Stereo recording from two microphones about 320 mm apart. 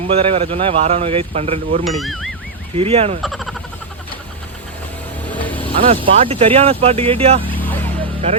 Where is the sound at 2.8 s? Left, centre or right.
Centre.